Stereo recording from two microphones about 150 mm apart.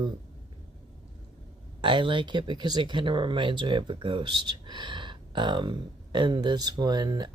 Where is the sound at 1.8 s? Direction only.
35° right (ahead or behind).